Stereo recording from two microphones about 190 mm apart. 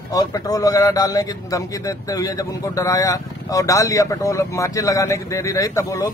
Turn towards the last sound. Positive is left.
turn(degrees=15)  # may be behind; listen again after turning